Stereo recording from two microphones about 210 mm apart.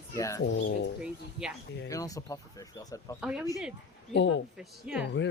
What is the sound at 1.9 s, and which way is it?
Speech, 15° left (ahead or behind).